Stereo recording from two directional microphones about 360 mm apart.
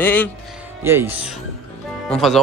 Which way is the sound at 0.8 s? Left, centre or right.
Centre.